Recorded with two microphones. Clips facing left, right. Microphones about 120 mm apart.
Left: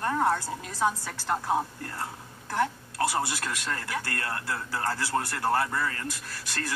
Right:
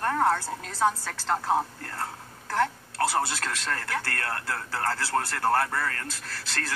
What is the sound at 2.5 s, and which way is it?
Speech, 15° left (ahead or behind).